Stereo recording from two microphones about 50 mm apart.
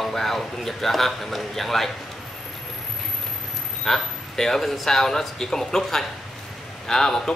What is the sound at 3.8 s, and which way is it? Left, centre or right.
Speech, centre.